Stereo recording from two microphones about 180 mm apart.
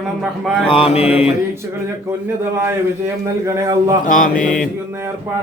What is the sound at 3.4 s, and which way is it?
Speech, 20° right (ahead or behind).